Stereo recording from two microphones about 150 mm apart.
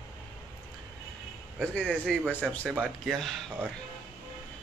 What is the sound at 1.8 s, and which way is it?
Speech, 5° left (ahead or behind).